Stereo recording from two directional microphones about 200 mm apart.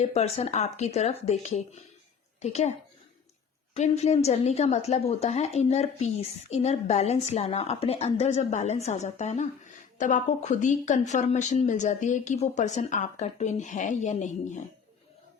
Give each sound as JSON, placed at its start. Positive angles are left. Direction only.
{"t": 0.0, "sound": "a woman's voice", "side_deg": 30}
{"t": 3.8, "sound": "a woman's voice", "side_deg": 35}